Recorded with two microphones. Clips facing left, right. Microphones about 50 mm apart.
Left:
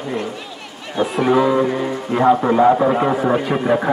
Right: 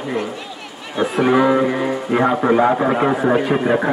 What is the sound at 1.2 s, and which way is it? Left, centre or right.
Speech, right.